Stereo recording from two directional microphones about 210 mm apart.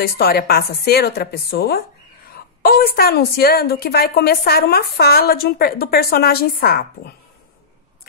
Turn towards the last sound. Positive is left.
turn(degrees=45)  # may be behind; listen again after turning